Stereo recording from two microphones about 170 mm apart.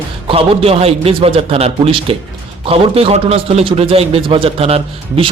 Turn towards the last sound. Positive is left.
turn(degrees=-35)  # may be behind; listen again after turning